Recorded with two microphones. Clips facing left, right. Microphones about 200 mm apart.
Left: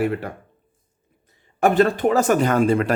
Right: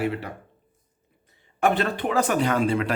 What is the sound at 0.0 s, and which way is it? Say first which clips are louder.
Speech: left 4 dB; 50° left (ahead or behind).